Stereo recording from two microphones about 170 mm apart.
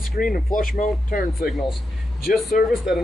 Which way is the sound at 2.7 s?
Centre (ahead or behind).